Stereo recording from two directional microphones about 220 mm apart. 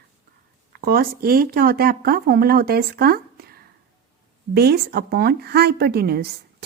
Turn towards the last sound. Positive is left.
turn(degrees=-45)  # may be behind; listen again after turning